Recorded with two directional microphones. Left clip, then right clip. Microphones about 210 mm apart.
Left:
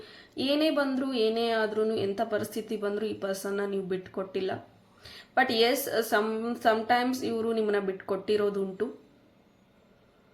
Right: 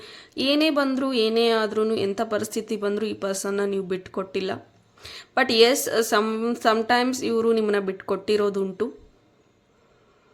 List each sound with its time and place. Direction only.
0.0 s speech: 35° right (ahead or behind)